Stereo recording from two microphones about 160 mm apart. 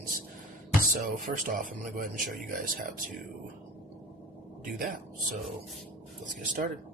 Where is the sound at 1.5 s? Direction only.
55° right (ahead or behind).